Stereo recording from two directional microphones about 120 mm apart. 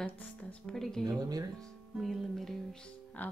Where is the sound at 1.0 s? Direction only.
30° right (ahead or behind).